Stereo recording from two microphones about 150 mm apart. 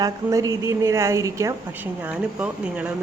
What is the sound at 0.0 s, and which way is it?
A woman's voice, 20° right (ahead or behind).